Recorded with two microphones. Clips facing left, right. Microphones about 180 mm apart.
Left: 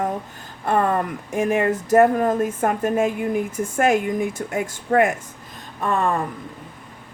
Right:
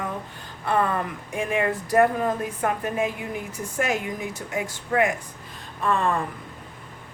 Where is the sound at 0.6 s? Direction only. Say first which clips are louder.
Left 4 dB; 45° left (ahead or behind).